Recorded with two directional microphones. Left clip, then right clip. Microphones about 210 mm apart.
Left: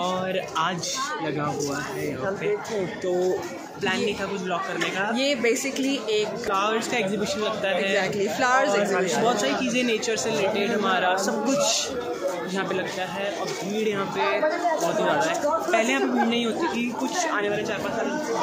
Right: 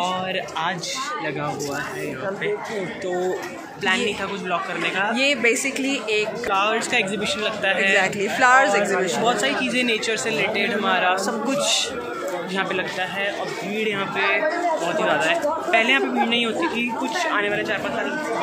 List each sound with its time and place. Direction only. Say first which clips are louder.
4.5 s speech: right 3 dB; 15° left (ahead or behind)
5.1 s a man's voice: right 4 dB; 5° left (ahead or behind)
6.5 s speech: right 4 dB; 25° left (ahead or behind)
7.9 s a man's voice: right 4 dB; centre (ahead or behind)
9.2 s speech: right 2 dB; 20° left (ahead or behind)
13.7 s speech: right 2 dB; 25° left (ahead or behind)